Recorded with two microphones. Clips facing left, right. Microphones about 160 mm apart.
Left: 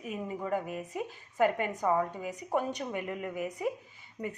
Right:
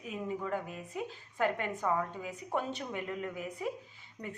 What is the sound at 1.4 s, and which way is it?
Speech, 10° left (ahead or behind).